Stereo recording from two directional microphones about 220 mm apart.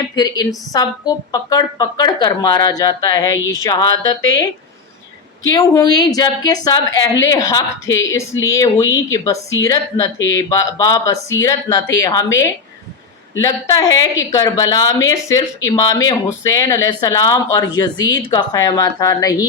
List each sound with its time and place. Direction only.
0.2 s speech: 15° left (ahead or behind)
5.5 s speech: 15° left (ahead or behind)